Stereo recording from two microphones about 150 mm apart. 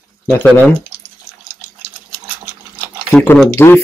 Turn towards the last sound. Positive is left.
turn(degrees=15)  # may be behind; listen again after turning